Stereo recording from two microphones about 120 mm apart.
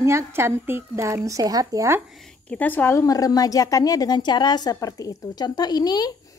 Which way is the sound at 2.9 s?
30° left (ahead or behind).